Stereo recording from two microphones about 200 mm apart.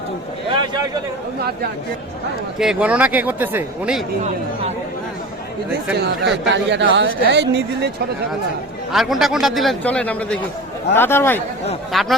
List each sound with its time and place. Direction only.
0.5 s a sound: 20° right (ahead or behind)
2.6 s speech: 5° right (ahead or behind)
6.4 s speech: 65° right (ahead or behind)
8.9 s a man's voice: centre (ahead or behind)
11.9 s a man's voice: centre (ahead or behind)